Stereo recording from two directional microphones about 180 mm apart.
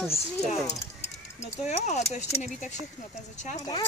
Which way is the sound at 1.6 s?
40° left (ahead or behind).